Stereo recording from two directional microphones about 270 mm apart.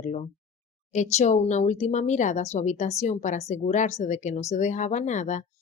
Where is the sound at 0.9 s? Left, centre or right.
Left.